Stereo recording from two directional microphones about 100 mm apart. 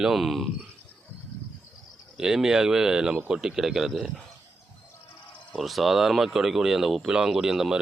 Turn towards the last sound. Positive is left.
turn(degrees=-5)  # may be behind; listen again after turning